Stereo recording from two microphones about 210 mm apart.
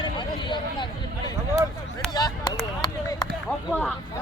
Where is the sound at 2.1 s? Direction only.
15° left (ahead or behind).